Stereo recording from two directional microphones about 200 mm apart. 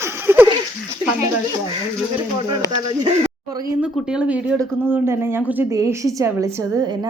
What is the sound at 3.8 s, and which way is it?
A woman's voice, 5° right (ahead or behind).